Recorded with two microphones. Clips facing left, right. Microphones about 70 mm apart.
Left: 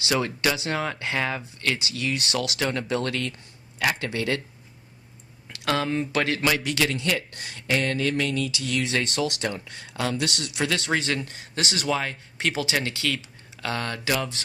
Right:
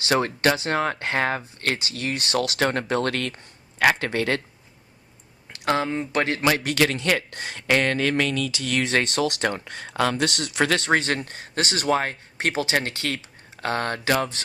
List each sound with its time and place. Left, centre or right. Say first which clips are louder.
0.0 s speech: right 4 dB; right
5.5 s speech: right 2 dB; right
7.5 s speech: right 4 dB; right
8.8 s speech: right 4 dB; right